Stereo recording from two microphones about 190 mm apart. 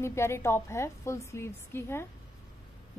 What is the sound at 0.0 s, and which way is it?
A woman's voice, 15° left (ahead or behind).